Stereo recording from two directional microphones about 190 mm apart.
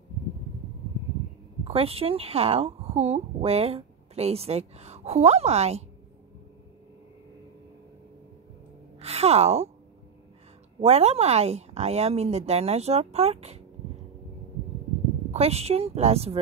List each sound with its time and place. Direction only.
1.6 s speech: 30° right (ahead or behind)
9.0 s speech: 35° right (ahead or behind)
10.8 s speech: 35° right (ahead or behind)
15.3 s speech: 35° right (ahead or behind)